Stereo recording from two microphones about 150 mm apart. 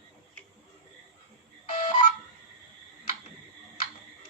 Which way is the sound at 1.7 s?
50° left (ahead or behind).